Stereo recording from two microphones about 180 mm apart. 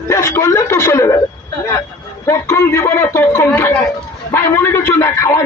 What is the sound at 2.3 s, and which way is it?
Speech, 15° left (ahead or behind).